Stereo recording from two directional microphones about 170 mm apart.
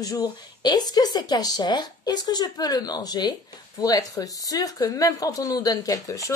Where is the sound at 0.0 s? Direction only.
20° left (ahead or behind).